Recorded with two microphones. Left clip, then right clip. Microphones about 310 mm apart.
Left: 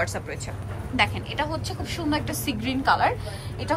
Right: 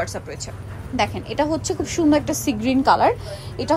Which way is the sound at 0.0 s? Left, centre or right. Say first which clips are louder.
Right 1 dB; centre.